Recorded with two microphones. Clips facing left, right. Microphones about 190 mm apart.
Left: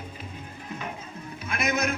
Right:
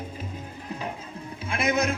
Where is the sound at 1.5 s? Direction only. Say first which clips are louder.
Right 3 dB; 30° right (ahead or behind).